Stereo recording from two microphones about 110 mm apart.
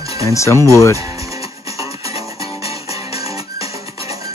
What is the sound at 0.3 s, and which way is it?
Speech, 25° left (ahead or behind).